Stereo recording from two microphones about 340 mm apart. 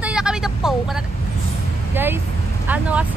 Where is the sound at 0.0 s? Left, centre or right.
Centre.